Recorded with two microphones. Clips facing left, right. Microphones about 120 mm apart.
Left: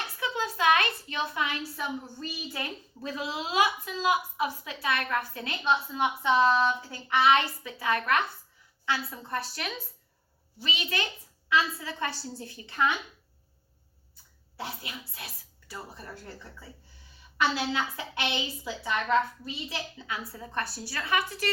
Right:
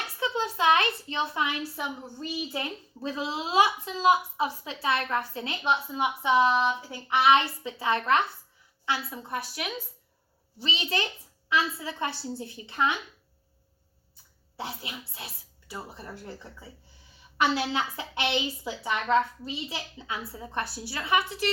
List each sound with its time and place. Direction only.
0.2 s a child's voice: 25° right (ahead or behind)
10.6 s a child's voice: 30° right (ahead or behind)
14.5 s a child's voice: 20° right (ahead or behind)